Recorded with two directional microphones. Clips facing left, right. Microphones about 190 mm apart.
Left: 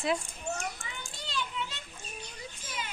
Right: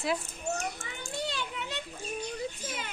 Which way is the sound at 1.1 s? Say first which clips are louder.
Right 3 dB; 60° right (ahead or behind).